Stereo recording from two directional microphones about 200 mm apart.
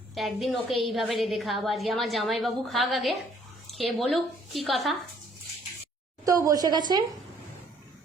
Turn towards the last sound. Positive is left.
turn(degrees=-20)  # may be behind; listen again after turning